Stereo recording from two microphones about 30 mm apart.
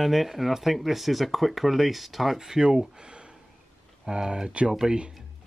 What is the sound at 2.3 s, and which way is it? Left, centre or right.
Speech, centre.